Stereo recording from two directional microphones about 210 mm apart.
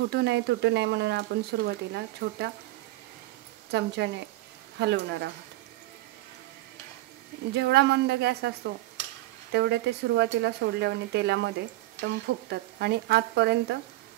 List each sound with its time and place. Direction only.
0.0 s speech: 50° right (ahead or behind)
3.7 s speech: 55° right (ahead or behind)
7.5 s speech: 55° right (ahead or behind)